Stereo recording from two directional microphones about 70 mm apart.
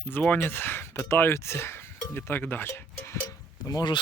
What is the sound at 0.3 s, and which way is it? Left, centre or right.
Cowbell, left.